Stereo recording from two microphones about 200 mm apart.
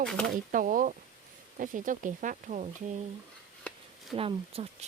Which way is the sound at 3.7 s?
5° left (ahead or behind).